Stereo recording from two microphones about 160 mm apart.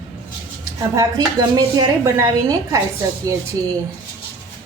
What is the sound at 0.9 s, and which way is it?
Speech, 20° right (ahead or behind).